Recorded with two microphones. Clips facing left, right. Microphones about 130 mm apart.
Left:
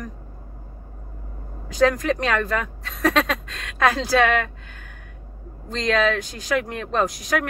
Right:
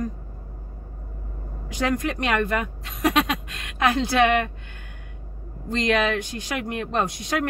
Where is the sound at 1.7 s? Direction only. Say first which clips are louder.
Left 5 dB; 20° right (ahead or behind).